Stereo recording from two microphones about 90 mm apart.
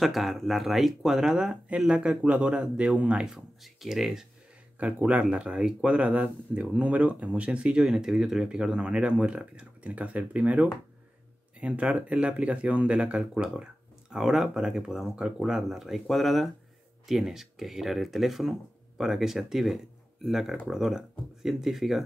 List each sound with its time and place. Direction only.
0.0 s speech: centre (ahead or behind)
4.7 s speech: 15° right (ahead or behind)